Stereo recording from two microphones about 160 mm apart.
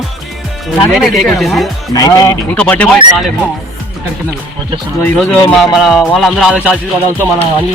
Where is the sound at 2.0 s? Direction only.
25° left (ahead or behind).